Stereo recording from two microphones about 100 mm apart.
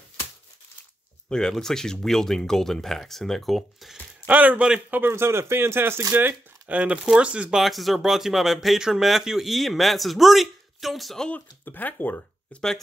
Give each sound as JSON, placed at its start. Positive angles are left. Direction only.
{"t": 1.3, "sound": "speech", "side_deg": 5}
{"t": 4.3, "sound": "speech", "side_deg": -15}
{"t": 5.0, "sound": "speech", "side_deg": -25}